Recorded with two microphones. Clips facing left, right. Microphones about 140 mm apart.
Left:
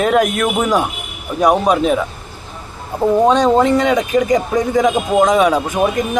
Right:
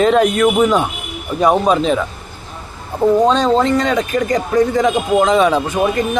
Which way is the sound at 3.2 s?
15° left (ahead or behind).